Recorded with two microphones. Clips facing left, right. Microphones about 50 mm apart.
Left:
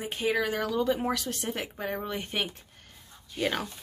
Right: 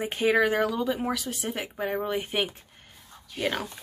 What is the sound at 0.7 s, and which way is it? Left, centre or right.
Speech, centre.